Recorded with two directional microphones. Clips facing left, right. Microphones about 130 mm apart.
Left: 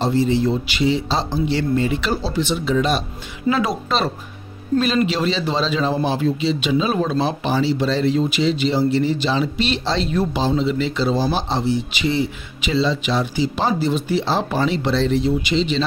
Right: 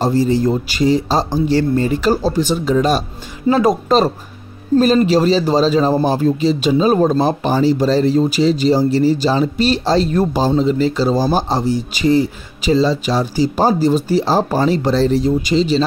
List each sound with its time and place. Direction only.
0.0 s speech: 40° right (ahead or behind)